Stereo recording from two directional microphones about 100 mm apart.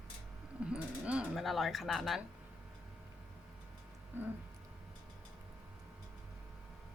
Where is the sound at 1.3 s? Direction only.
Centre (ahead or behind).